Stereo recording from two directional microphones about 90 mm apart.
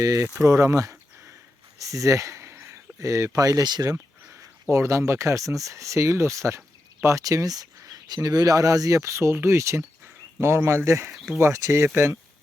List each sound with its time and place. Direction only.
0.0 s speech: 40° right (ahead or behind)
4.7 s speech: 35° right (ahead or behind)